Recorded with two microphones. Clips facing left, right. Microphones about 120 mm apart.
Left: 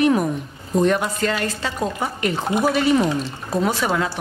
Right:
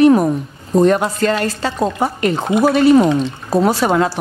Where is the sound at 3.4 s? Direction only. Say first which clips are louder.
Right 6 dB; 35° right (ahead or behind).